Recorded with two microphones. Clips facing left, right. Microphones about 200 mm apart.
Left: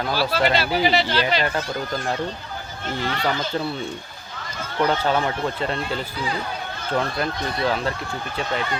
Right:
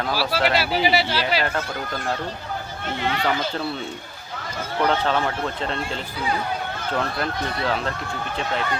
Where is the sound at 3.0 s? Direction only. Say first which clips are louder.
Right 2 dB; 40° left (ahead or behind).